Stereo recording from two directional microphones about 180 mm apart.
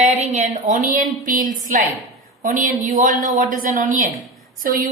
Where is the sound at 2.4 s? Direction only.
45° right (ahead or behind).